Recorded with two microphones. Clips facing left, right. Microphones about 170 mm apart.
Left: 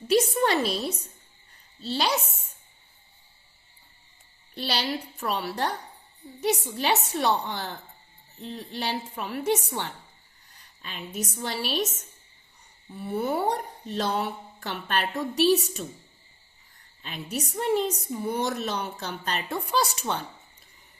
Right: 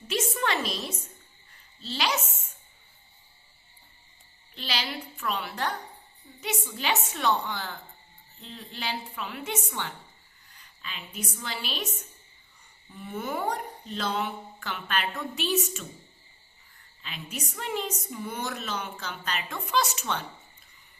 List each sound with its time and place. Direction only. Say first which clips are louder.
0.1 s a woman's voice: left 7 dB; 35° left (ahead or behind)
4.5 s a woman's voice: left 5 dB; 40° left (ahead or behind)
17.0 s a woman's voice: left 5 dB; 40° left (ahead or behind)